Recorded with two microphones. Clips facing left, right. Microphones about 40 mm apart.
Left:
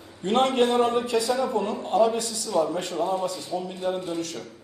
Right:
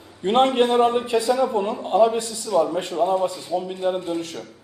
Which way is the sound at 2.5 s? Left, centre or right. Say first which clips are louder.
Right 4 dB; centre.